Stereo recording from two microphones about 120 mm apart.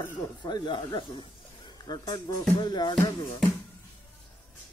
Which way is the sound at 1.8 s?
35° left (ahead or behind).